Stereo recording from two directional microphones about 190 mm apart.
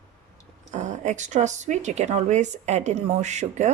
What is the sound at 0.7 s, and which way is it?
Speech, 40° right (ahead or behind).